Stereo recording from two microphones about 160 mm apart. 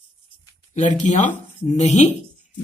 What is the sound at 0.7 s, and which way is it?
Speech, 50° left (ahead or behind).